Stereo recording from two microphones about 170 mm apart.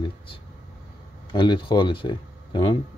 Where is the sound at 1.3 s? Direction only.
30° left (ahead or behind).